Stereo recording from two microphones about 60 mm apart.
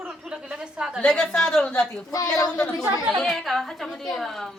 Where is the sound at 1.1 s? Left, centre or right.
Centre.